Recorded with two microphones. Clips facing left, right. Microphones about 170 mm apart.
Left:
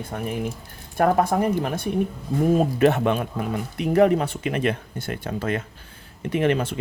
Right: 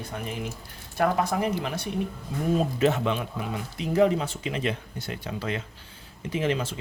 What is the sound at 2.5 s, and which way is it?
Speech, 60° left (ahead or behind).